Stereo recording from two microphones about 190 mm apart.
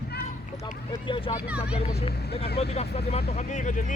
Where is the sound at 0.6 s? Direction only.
25° left (ahead or behind).